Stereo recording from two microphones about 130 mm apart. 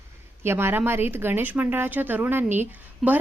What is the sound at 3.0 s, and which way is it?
Speech, centre (ahead or behind).